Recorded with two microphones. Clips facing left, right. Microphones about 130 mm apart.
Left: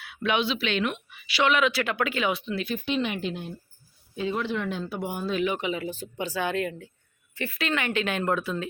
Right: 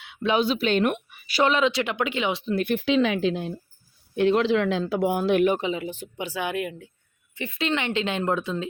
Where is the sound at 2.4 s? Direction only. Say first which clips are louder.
Right 6 dB; 50° right (ahead or behind).